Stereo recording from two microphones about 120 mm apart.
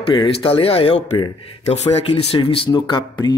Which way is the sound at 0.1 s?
45° left (ahead or behind).